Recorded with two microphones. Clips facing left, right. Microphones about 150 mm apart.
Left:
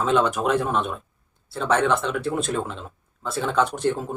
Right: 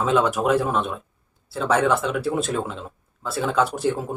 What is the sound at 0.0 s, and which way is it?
Speech, 5° right (ahead or behind).